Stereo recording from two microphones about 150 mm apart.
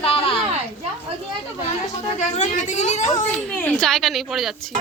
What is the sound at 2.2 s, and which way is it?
Speech, 50° left (ahead or behind).